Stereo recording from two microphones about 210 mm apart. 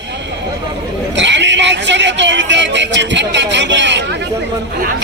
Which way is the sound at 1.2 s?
60° right (ahead or behind).